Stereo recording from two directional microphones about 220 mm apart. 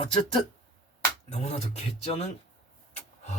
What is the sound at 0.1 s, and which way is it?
Speech, 25° left (ahead or behind).